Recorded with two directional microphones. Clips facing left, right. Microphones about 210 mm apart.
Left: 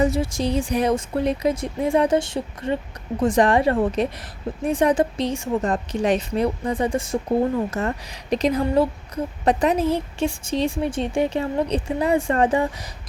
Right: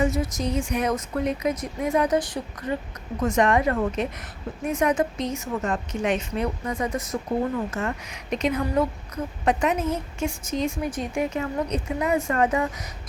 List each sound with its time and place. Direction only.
0.0 s a woman's voice: 30° left (ahead or behind)